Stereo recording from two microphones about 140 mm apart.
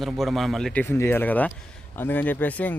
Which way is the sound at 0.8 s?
15° left (ahead or behind).